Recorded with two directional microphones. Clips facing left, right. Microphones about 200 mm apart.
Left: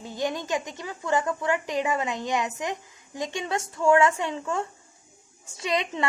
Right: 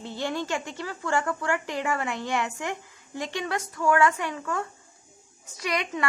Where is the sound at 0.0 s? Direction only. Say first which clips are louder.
Left 1 dB; 15° left (ahead or behind).